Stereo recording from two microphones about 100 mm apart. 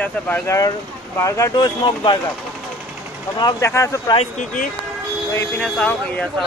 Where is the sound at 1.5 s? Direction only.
45° left (ahead or behind).